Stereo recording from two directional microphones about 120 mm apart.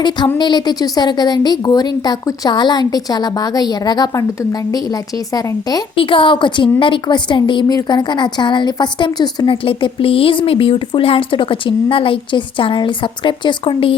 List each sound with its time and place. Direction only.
0.3 s a woman's voice: 35° left (ahead or behind)
6.0 s a woman's voice: 45° left (ahead or behind)
9.6 s a woman's voice: 50° left (ahead or behind)